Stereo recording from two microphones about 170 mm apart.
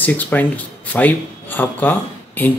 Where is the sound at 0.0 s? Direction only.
10° left (ahead or behind).